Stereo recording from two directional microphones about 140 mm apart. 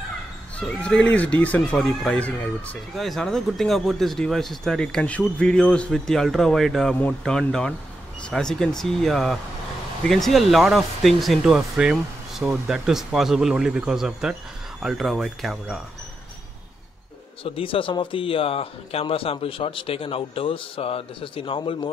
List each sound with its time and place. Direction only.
0.6 s speech: 10° left (ahead or behind)
17.4 s a man's voice: 40° left (ahead or behind)